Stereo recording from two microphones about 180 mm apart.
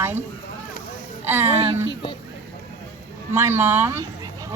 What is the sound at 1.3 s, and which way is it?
Speech, 10° right (ahead or behind).